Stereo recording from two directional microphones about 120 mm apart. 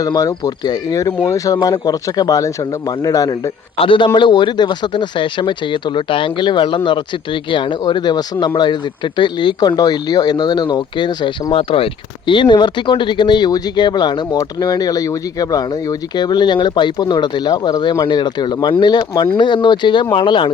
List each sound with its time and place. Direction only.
0.0 s speech: 30° left (ahead or behind)
3.8 s speech: 45° left (ahead or behind)
11.5 s speech: 50° left (ahead or behind)